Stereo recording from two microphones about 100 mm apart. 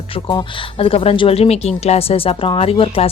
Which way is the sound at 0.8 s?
70° left (ahead or behind).